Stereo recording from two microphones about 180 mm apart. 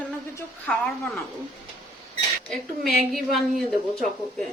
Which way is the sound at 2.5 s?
Centre (ahead or behind).